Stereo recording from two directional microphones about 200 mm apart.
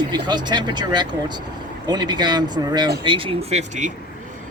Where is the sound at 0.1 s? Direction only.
20° right (ahead or behind).